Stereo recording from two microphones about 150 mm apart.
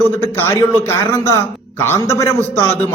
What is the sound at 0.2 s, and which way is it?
A man's voice, 15° left (ahead or behind).